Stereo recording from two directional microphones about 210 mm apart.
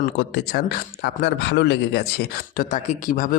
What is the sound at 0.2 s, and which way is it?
Speech, 50° left (ahead or behind).